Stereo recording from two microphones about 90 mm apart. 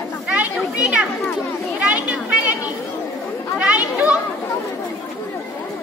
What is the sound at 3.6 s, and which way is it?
Children playing, 15° right (ahead or behind).